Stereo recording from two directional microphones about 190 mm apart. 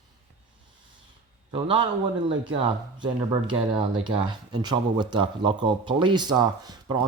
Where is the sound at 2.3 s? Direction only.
25° right (ahead or behind).